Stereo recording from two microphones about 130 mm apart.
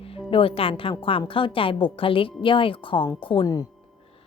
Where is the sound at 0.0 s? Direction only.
45° left (ahead or behind).